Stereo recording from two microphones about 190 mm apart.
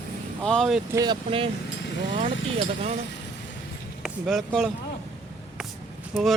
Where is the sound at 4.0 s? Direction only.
Centre (ahead or behind).